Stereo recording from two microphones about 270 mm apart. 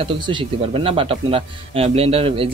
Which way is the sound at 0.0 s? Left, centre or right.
Centre.